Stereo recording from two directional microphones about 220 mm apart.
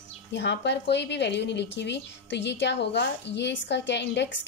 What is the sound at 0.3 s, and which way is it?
A woman's voice, 50° left (ahead or behind).